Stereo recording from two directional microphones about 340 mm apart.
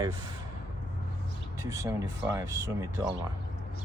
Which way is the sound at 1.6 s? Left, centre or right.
Centre.